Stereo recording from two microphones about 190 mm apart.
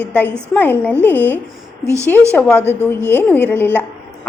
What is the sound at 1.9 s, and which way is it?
Speech, 15° right (ahead or behind).